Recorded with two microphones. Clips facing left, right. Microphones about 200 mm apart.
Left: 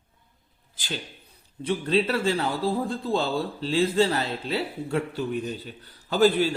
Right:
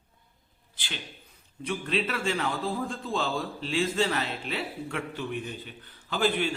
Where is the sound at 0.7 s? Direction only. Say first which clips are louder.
Left 6 dB; 40° left (ahead or behind).